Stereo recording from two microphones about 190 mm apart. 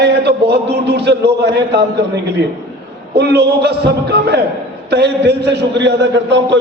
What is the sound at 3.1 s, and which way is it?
A man's voice, 60° right (ahead or behind).